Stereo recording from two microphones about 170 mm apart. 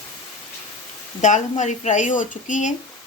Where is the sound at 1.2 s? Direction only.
45° left (ahead or behind).